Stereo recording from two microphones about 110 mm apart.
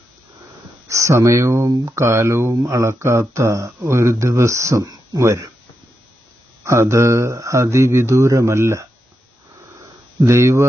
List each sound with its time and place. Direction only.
0.9 s speech: 25° right (ahead or behind)
6.7 s speech: 25° right (ahead or behind)
10.2 s speech: 25° right (ahead or behind)